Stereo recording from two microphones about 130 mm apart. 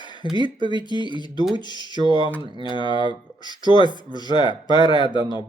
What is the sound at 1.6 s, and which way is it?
Speech, 35° left (ahead or behind).